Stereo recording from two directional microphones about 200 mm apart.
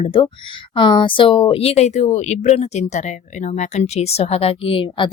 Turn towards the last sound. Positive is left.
turn(degrees=25)  # may be behind; listen again after turning